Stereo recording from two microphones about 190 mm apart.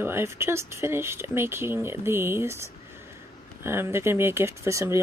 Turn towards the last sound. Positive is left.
turn(degrees=-15)  # may be behind; listen again after turning